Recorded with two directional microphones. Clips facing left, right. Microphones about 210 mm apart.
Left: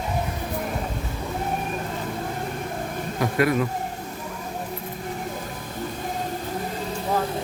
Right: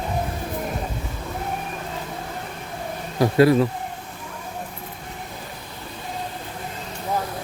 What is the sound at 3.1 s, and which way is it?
Speech, 30° right (ahead or behind).